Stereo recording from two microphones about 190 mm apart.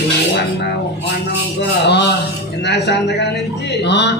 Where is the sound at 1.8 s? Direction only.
65° left (ahead or behind).